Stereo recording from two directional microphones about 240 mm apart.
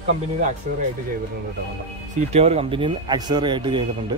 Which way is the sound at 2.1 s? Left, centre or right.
Right.